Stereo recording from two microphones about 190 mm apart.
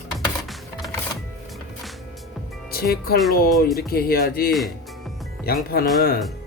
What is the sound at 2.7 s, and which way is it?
Speech, 55° left (ahead or behind).